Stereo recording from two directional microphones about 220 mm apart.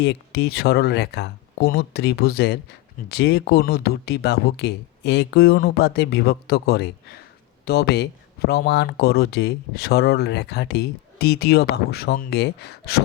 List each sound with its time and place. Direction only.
0.0 s speech: 50° left (ahead or behind)